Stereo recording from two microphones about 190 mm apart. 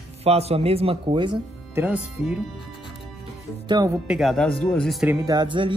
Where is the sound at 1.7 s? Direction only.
10° right (ahead or behind).